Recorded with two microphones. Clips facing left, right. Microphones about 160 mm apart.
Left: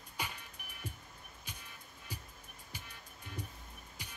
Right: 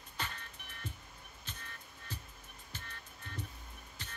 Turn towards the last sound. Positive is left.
turn(degrees=10)  # may be behind; listen again after turning